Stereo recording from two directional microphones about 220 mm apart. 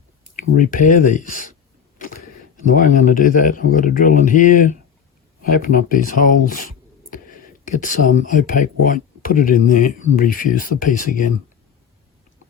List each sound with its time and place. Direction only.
0.5 s speech: 40° left (ahead or behind)
2.0 s a sound: 40° left (ahead or behind)
2.7 s speech: 35° left (ahead or behind)
7.8 s speech: 35° left (ahead or behind)